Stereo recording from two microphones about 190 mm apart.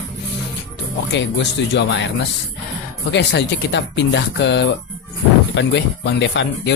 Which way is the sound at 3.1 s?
65° left (ahead or behind).